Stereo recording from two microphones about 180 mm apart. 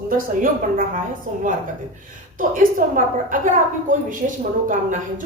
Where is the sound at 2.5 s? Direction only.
50° right (ahead or behind).